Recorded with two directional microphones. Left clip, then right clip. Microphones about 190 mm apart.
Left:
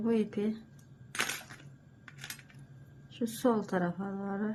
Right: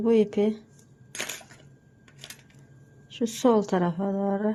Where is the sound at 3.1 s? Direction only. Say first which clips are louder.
Right 8 dB; 30° right (ahead or behind).